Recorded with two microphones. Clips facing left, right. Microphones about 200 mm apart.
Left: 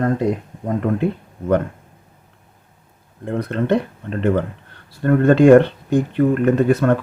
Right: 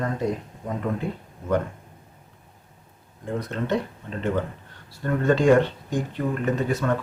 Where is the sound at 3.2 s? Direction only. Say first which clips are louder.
Left 7 dB; 60° left (ahead or behind).